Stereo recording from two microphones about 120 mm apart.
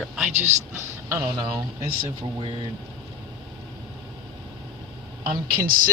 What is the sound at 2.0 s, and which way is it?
Speech, 45° right (ahead or behind).